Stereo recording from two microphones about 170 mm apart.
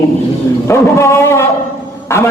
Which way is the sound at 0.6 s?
15° left (ahead or behind).